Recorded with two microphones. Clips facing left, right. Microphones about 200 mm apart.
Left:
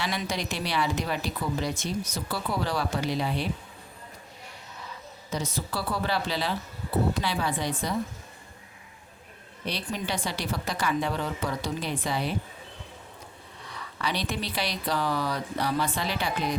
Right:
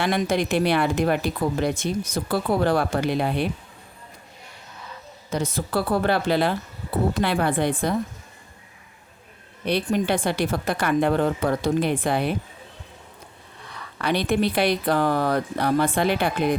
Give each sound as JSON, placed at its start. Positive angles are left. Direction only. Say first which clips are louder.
{"t": 0.0, "sound": "speech", "louder": "right 9 dB", "side_deg": -55}
{"t": 5.3, "sound": "speech", "louder": "right 7 dB", "side_deg": -55}
{"t": 9.6, "sound": "speech", "louder": "right 10 dB", "side_deg": -55}
{"t": 14.0, "sound": "speech", "louder": "right 9 dB", "side_deg": -55}